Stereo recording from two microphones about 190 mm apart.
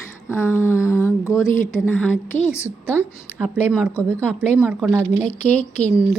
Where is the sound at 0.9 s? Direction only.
15° left (ahead or behind).